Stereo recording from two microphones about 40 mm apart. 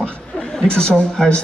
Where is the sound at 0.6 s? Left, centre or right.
Left.